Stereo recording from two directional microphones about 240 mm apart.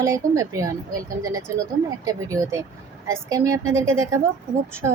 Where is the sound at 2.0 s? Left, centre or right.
Centre.